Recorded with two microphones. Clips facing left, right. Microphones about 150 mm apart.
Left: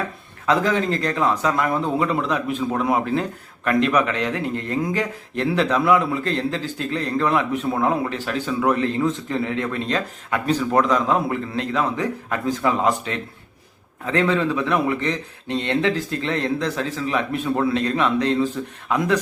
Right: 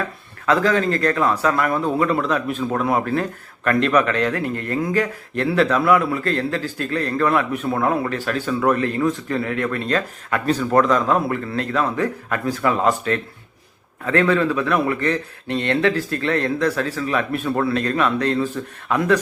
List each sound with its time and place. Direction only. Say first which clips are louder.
0.4 s a man's voice: right 2 dB; 20° left (ahead or behind)